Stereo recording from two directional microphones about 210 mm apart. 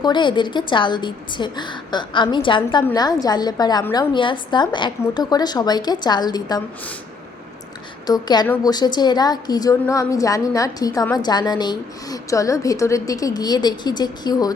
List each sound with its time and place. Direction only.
0.0 s a woman's voice: 20° left (ahead or behind)
8.0 s a woman's voice: 20° left (ahead or behind)